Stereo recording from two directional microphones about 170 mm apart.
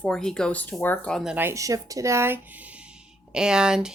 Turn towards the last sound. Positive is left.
turn(degrees=-5)  # may be behind; listen again after turning